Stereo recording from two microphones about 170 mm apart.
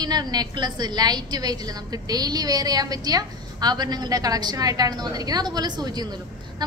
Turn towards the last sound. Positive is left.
turn(degrees=-25)  # may be behind; listen again after turning